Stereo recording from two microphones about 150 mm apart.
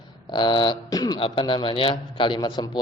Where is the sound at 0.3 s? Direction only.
30° left (ahead or behind).